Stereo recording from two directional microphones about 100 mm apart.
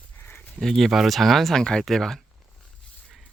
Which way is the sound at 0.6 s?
Centre (ahead or behind).